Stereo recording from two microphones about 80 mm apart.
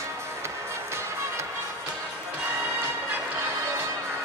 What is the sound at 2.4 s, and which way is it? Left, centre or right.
Music, right.